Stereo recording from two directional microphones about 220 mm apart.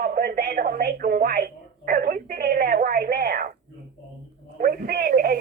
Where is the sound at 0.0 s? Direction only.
40° right (ahead or behind).